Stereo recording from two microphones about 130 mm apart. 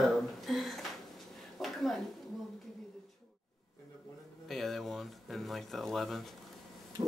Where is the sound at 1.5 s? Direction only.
Centre (ahead or behind).